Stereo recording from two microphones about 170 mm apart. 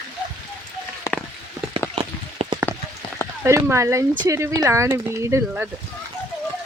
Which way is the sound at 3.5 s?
15° right (ahead or behind).